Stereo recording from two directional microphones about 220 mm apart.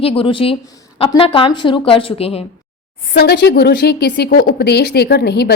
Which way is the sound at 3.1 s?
50° left (ahead or behind).